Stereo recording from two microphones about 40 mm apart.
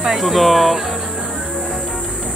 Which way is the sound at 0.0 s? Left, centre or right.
Centre.